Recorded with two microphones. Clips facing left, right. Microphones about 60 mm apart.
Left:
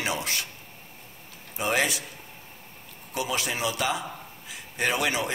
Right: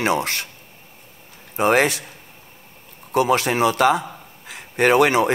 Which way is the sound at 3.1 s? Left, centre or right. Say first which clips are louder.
Right 11 dB; right.